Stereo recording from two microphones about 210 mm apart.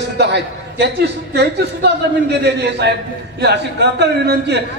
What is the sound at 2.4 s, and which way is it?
A man's voice, 55° right (ahead or behind).